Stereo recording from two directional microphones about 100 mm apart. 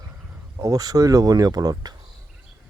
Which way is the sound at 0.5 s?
30° right (ahead or behind).